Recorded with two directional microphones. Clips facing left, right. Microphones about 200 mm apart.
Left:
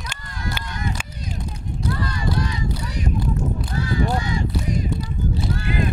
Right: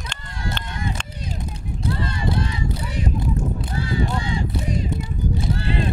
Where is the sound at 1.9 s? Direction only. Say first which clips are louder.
Right 1 dB; 25° right (ahead or behind).